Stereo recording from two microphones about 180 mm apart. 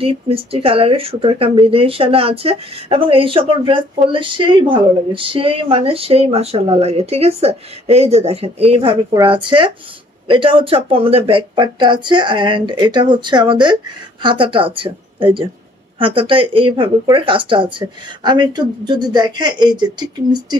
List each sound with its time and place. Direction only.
0.0 s speech: 30° right (ahead or behind)